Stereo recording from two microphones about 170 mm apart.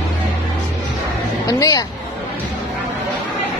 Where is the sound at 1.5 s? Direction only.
20° left (ahead or behind).